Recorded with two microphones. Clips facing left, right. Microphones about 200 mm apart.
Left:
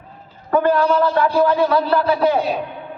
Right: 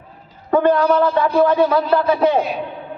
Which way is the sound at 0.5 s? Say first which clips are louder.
Right 1 dB; 20° right (ahead or behind).